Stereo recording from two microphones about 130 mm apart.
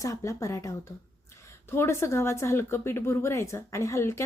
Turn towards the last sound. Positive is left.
turn(degrees=20)  # may be behind; listen again after turning